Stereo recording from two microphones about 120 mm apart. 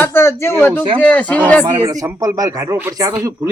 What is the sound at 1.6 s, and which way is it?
Speech, 30° right (ahead or behind).